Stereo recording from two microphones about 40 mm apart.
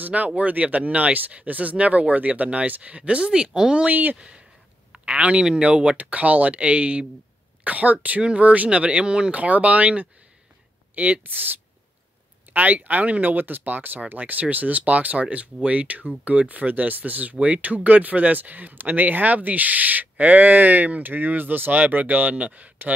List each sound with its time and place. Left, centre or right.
0.0 s speech: right
3.9 s speech: right
5.0 s speech: right
9.4 s speech: right
11.2 s speech: right
12.5 s speech: right